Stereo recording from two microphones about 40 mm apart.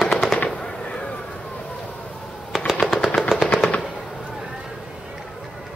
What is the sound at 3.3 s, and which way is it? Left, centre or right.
Machine gun, centre.